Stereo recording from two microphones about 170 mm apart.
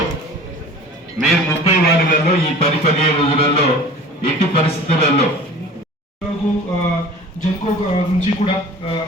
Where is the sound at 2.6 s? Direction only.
35° left (ahead or behind).